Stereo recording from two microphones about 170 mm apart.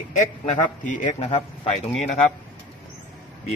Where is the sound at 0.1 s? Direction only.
45° left (ahead or behind).